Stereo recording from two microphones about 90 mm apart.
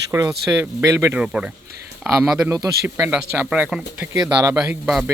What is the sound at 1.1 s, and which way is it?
Speech, 10° right (ahead or behind).